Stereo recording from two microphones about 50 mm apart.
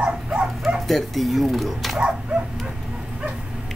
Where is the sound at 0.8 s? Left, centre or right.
Centre.